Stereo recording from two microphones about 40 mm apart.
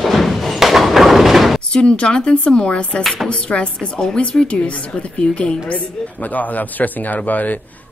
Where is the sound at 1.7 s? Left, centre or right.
Left.